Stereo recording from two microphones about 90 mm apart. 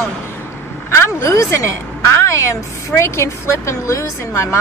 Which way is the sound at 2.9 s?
30° left (ahead or behind).